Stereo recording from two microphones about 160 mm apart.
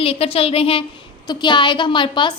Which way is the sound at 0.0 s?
35° left (ahead or behind).